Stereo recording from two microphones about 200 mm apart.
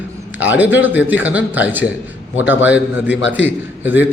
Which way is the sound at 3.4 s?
10° right (ahead or behind).